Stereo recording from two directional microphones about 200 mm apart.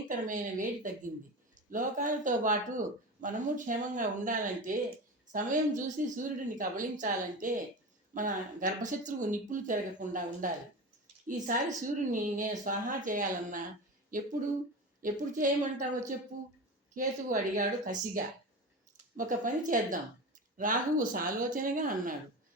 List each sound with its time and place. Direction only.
0.3 s speech: 40° right (ahead or behind)